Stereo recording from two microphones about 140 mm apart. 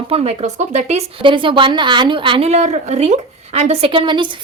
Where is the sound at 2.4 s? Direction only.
55° right (ahead or behind).